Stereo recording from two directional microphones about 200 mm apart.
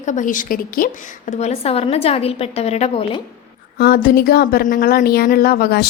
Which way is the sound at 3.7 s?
50° left (ahead or behind).